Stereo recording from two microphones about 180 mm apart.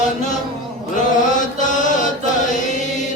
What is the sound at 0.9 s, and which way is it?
Chant, 45° left (ahead or behind).